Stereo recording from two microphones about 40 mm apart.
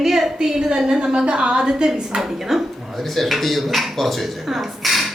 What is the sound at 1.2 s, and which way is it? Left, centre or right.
Speech, right.